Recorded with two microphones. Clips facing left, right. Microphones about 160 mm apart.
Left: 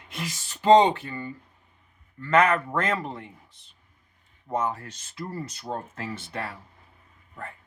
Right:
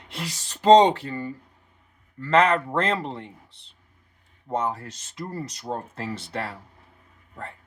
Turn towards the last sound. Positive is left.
turn(degrees=-35)  # may be behind; listen again after turning